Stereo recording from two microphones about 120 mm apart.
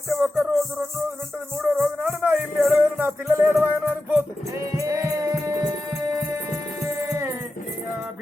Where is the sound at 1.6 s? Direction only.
20° right (ahead or behind).